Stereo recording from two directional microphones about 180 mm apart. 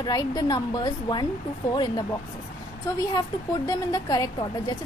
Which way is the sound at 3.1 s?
20° left (ahead or behind).